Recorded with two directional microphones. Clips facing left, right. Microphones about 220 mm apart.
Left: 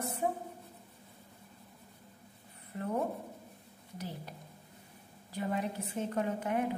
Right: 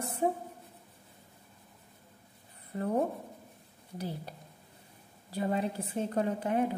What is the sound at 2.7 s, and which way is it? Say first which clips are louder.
Speech: right 5 dB; 35° right (ahead or behind).